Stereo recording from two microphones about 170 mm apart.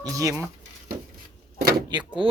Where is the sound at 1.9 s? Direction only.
25° right (ahead or behind).